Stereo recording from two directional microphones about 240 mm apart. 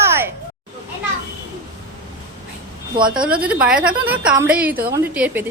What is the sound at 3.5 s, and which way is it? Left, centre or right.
A woman's voice, centre.